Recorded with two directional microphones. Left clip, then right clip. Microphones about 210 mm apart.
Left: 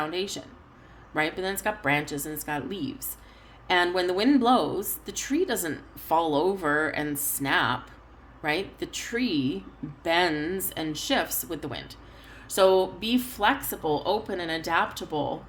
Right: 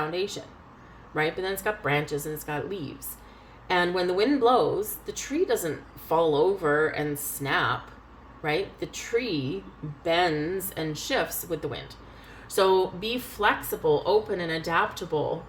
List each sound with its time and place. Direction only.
0.0 s a woman's voice: 50° left (ahead or behind)